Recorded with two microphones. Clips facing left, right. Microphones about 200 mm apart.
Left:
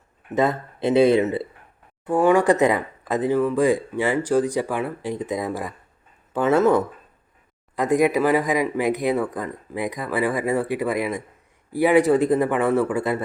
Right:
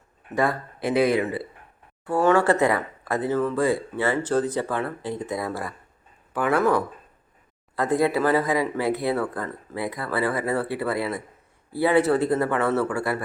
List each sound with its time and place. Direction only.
0.3 s speech: 20° left (ahead or behind)